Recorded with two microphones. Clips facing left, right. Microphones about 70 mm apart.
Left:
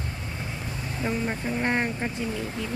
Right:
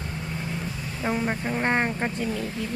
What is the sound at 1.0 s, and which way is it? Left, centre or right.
Vehicle, right.